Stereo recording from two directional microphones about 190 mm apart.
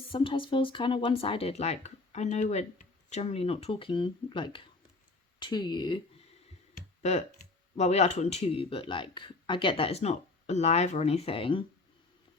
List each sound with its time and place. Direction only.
0.1 s speech: 25° left (ahead or behind)
7.0 s speech: 35° left (ahead or behind)